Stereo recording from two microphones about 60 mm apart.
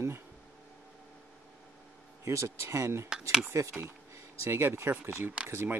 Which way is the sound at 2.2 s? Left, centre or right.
Right.